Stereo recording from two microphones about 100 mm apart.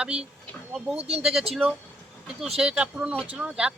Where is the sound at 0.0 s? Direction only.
10° right (ahead or behind).